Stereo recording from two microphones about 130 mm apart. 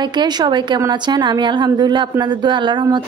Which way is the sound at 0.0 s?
35° right (ahead or behind).